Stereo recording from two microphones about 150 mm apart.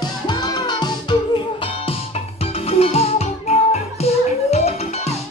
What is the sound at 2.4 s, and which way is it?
Music, 40° left (ahead or behind).